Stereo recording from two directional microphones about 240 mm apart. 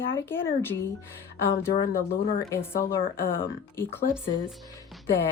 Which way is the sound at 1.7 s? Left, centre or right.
Left.